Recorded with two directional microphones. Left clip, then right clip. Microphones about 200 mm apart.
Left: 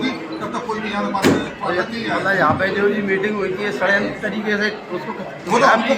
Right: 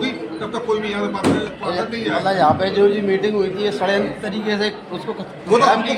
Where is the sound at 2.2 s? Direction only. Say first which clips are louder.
Right 1 dB; 60° right (ahead or behind).